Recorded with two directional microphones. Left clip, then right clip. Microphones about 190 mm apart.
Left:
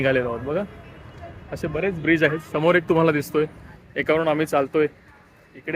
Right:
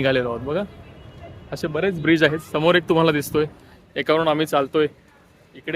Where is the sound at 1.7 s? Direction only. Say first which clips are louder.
Right 2 dB; 30° right (ahead or behind).